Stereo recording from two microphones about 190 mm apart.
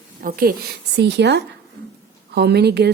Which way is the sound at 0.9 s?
65° right (ahead or behind).